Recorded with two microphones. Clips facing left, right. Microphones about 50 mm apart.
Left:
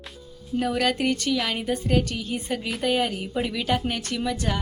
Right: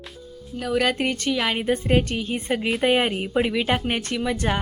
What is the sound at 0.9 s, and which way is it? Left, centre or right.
Speech, right.